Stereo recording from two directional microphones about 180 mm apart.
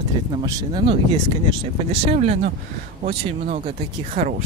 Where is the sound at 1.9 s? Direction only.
35° right (ahead or behind).